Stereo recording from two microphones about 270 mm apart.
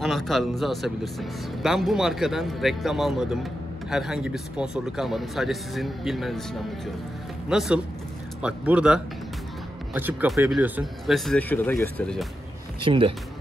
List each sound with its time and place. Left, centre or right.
0.0 s speech: centre
7.4 s speech: centre
12.8 s speech: centre